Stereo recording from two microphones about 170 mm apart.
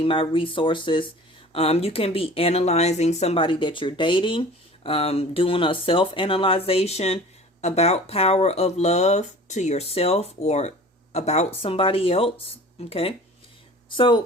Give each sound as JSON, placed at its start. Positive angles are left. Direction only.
{"t": 0.0, "sound": "speech", "side_deg": 30}